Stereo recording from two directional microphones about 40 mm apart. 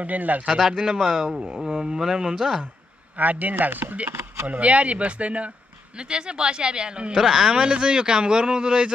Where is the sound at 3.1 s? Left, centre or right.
Right.